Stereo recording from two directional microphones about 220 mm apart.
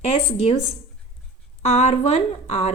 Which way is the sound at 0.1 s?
30° left (ahead or behind).